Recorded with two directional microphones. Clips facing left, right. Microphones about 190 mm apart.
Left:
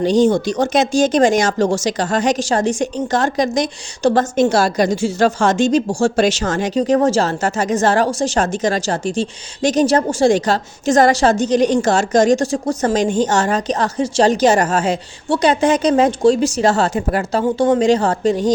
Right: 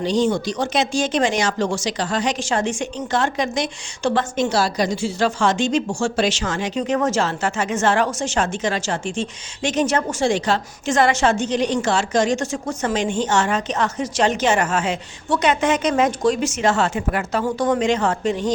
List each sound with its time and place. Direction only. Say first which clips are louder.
0.0 s speech: left 6 dB; 45° left (ahead or behind)